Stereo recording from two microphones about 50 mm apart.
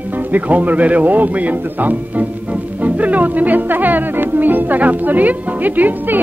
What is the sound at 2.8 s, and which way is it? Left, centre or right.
Music, right.